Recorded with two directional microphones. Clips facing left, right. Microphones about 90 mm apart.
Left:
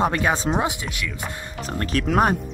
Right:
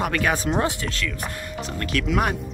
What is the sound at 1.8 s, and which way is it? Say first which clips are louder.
Speech: left 4 dB; 35° left (ahead or behind).